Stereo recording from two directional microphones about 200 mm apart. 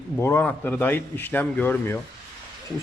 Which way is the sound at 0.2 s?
10° left (ahead or behind).